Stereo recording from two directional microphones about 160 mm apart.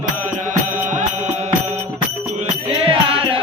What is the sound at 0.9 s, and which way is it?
Music, 50° right (ahead or behind).